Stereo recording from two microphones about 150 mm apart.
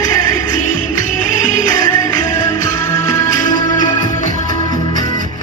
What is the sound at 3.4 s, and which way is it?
Music, 60° left (ahead or behind).